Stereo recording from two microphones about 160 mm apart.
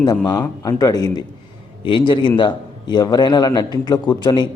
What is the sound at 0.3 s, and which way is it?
A man's voice, 20° left (ahead or behind).